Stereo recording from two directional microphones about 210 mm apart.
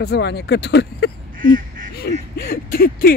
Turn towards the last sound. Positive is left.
turn(degrees=45)  # may be behind; listen again after turning